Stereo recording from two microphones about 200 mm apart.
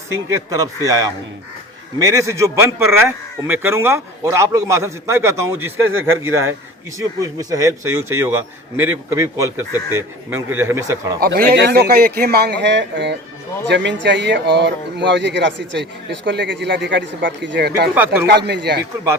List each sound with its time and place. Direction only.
0.1 s a man's voice: 15° right (ahead or behind)
11.2 s a man's voice: 50° right (ahead or behind)
17.9 s a man's voice: 10° right (ahead or behind)
18.3 s speech: 60° right (ahead or behind)